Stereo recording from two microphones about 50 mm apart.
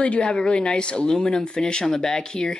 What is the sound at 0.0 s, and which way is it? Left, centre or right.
Speech, centre.